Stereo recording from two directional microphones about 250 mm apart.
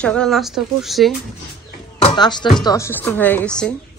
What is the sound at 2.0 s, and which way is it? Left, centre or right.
A woman's voice, centre.